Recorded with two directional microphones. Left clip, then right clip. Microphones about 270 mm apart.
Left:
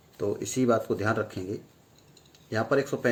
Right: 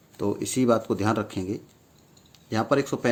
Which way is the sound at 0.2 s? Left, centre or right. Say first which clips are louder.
Right 2 dB; right.